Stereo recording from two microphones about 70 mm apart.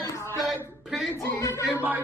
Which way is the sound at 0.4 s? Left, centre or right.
Centre.